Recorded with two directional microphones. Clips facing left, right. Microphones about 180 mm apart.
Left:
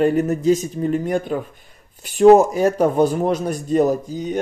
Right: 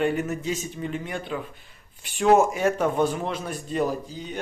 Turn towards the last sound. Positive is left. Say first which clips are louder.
# left 8 dB
turn(degrees=45)  # may be behind; listen again after turning